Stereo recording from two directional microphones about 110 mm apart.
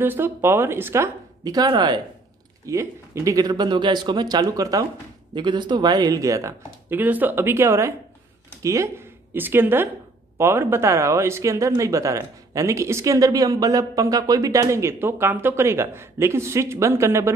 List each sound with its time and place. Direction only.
0.0 s speech: 20° right (ahead or behind); by 2.0 s 45° right (ahead or behind)
2.6 s speech: 25° right (ahead or behind)
5.3 s speech: 45° right (ahead or behind)
6.9 s speech: 15° right (ahead or behind)